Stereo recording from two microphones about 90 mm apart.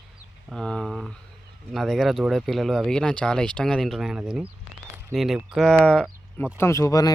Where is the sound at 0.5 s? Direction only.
5° left (ahead or behind); by 4.4 s 10° right (ahead or behind).